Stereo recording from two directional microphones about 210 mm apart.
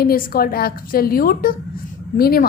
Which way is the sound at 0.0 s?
45° left (ahead or behind).